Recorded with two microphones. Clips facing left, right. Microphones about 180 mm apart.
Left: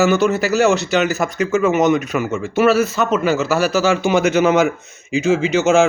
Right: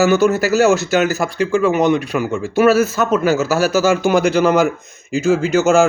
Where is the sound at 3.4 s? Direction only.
40° right (ahead or behind).